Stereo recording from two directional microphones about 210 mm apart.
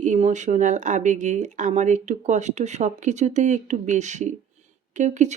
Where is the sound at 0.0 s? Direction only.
35° right (ahead or behind).